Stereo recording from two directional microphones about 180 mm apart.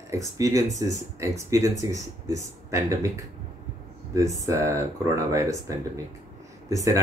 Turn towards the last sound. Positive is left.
turn(degrees=-20)  # may be behind; listen again after turning